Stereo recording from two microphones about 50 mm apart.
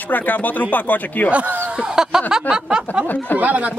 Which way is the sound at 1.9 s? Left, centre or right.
Centre.